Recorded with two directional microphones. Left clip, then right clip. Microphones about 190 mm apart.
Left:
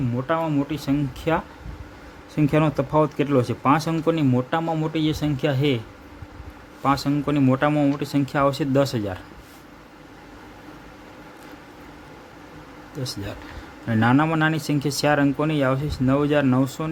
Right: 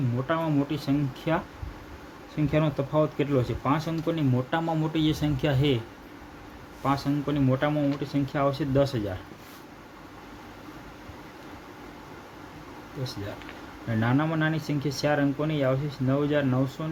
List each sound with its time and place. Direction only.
0.3 s speech: 20° left (ahead or behind)
2.3 s speech: 35° left (ahead or behind)
6.8 s speech: 30° left (ahead or behind)
14.0 s speech: 35° left (ahead or behind)